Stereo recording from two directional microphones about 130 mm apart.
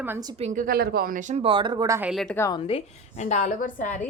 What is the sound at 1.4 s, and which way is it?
Speech, 40° right (ahead or behind).